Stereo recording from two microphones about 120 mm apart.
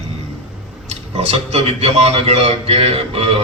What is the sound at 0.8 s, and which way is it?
A man's voice, 65° right (ahead or behind).